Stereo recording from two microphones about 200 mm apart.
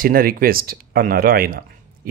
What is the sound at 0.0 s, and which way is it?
A man's voice, 45° right (ahead or behind).